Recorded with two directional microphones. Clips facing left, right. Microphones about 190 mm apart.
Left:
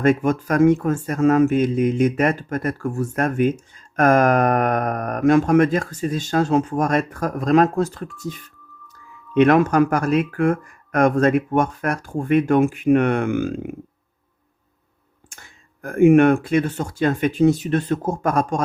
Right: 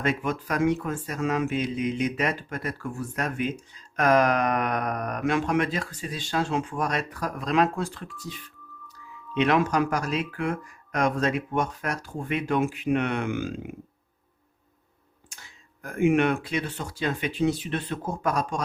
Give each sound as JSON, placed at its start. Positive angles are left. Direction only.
{"t": 0.0, "sound": "speech", "side_deg": 45}
{"t": 15.3, "sound": "speech", "side_deg": 50}